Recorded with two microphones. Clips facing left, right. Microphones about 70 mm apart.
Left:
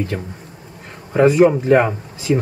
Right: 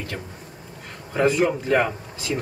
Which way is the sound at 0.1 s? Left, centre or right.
Centre.